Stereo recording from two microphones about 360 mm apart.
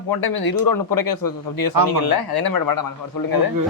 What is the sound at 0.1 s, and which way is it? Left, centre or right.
Speech, left.